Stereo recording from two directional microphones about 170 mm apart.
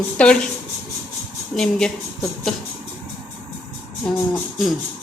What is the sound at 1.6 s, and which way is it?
Speech, 5° left (ahead or behind).